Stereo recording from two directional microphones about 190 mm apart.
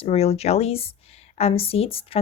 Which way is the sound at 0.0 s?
30° left (ahead or behind).